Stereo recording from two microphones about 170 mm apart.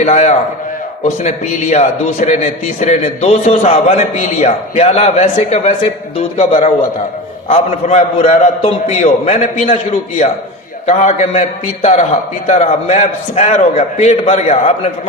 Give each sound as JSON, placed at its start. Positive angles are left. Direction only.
{"t": 0.0, "sound": "a man's voice", "side_deg": 40}
{"t": 10.8, "sound": "a man's voice", "side_deg": 40}